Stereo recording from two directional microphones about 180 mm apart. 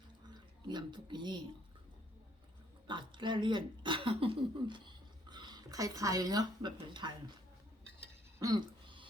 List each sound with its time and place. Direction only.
0.3 s speech: 25° right (ahead or behind)
2.8 s a woman's voice: 25° right (ahead or behind)
8.4 s a sound: 20° right (ahead or behind)